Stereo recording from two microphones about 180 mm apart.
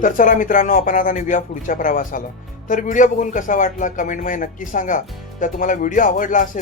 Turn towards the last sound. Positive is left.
turn(degrees=45)  # may be behind; listen again after turning